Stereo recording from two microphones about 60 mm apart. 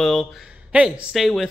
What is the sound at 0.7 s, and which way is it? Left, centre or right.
Speech, centre.